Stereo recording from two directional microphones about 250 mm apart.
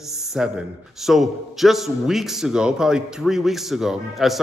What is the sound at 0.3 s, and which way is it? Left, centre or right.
A man's voice, centre.